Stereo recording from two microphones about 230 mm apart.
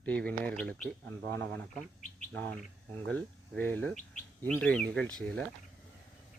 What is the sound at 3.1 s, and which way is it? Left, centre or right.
Speech, centre.